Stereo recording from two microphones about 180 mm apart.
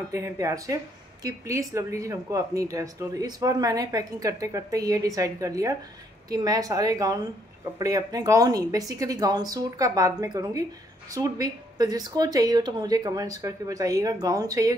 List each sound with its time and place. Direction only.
0.1 s speech: 15° right (ahead or behind)